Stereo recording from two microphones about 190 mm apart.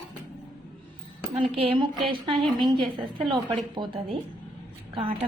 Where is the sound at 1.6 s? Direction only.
30° right (ahead or behind).